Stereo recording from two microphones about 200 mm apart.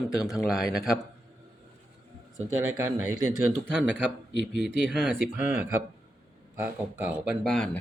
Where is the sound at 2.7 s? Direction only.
15° right (ahead or behind).